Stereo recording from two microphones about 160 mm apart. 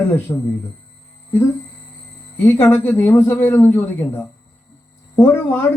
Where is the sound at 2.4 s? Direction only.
15° left (ahead or behind).